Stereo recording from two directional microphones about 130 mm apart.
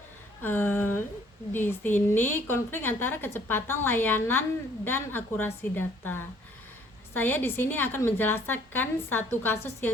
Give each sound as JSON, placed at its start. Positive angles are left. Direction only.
{"t": 0.4, "sound": "a woman's voice", "side_deg": 15}